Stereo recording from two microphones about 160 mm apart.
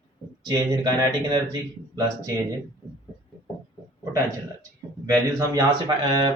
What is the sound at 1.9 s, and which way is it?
Speech, 20° right (ahead or behind).